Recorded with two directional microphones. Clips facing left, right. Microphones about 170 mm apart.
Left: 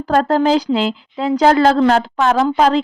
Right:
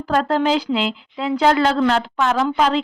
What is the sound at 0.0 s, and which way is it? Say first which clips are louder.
A woman's voice: left 4 dB; 40° left (ahead or behind).